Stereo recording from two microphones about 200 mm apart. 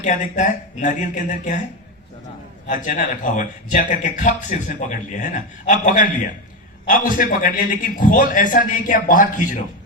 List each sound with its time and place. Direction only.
0.0 s speech: 40° left (ahead or behind)
2.6 s a man's voice: 40° left (ahead or behind)